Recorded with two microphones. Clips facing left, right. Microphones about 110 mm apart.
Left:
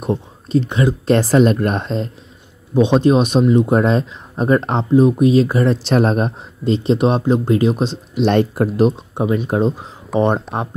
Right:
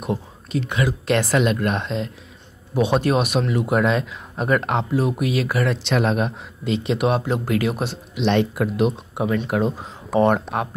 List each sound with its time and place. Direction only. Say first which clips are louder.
0.0 s a man's voice: left 5 dB; 35° left (ahead or behind)
2.7 s a man's voice: left 6 dB; 25° left (ahead or behind)
8.1 s a man's voice: left 4 dB; 45° left (ahead or behind); by 9.8 s 25° left (ahead or behind)
10.1 s speech: left 1 dB; centre (ahead or behind)